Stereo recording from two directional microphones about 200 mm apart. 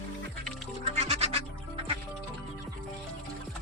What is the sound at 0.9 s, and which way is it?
Music, 30° right (ahead or behind).